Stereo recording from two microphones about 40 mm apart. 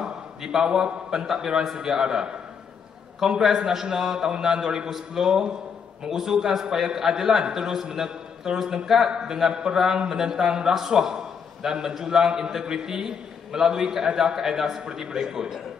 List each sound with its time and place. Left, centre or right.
0.0 s a man's voice: centre